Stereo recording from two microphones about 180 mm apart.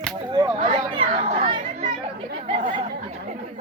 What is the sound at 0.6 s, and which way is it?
Chatter, 30° right (ahead or behind).